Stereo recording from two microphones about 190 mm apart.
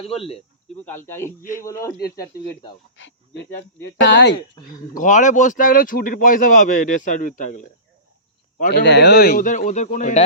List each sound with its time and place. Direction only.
0.1 s speech: 30° left (ahead or behind)
0.9 s speech: 10° left (ahead or behind)
2.9 s speech: 75° left (ahead or behind)
4.6 s speech: 20° left (ahead or behind)
4.9 s a man's voice: 40° left (ahead or behind)
8.7 s a man's voice: 65° left (ahead or behind); by 10.2 s 40° left (ahead or behind)